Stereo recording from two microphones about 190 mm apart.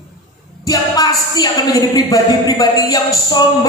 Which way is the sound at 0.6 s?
20° left (ahead or behind).